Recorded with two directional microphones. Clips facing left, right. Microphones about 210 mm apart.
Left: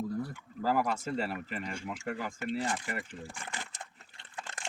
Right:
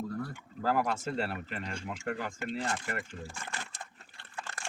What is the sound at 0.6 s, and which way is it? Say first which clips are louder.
Speech: even; 5° left (ahead or behind).